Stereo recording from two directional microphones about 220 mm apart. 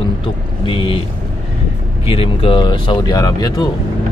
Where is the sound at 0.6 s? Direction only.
25° left (ahead or behind).